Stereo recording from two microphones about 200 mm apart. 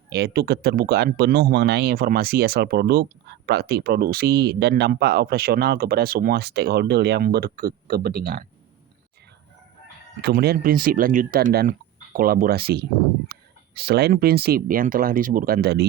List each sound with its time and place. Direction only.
0.1 s speech: 55° right (ahead or behind)
10.2 s speech: 55° right (ahead or behind)